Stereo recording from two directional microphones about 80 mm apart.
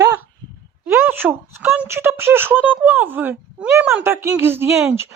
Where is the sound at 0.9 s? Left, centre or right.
Right.